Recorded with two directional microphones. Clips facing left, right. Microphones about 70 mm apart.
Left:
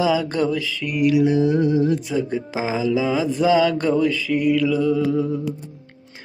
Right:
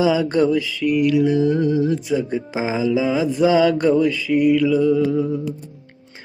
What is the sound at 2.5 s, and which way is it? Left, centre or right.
Mantra, right.